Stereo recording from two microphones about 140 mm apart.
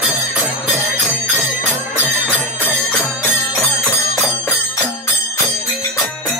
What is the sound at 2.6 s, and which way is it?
Music, 15° left (ahead or behind).